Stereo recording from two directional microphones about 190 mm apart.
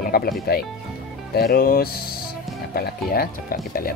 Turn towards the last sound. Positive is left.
turn(degrees=50)  # may be behind; listen again after turning